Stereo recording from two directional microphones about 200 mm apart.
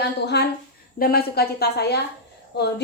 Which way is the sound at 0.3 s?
55° left (ahead or behind).